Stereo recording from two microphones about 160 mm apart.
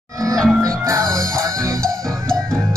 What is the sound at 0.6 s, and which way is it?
Music, 20° right (ahead or behind).